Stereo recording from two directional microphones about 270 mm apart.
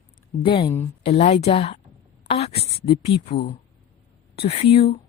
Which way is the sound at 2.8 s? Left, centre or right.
Left.